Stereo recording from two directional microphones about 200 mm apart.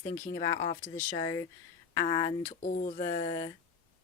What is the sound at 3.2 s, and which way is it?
Speech, 15° left (ahead or behind).